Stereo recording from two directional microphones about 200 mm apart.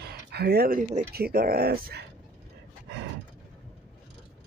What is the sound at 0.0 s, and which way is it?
Speech, 55° right (ahead or behind).